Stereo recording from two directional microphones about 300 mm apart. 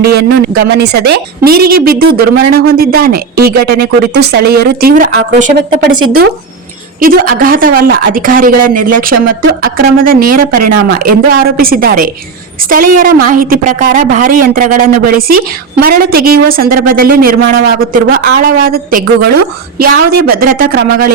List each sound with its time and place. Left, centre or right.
0.0 s speech: right
7.0 s speech: right